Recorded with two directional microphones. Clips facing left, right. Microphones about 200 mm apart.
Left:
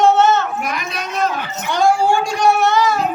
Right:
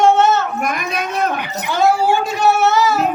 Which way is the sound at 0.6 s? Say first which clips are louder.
Right 3 dB; 50° right (ahead or behind).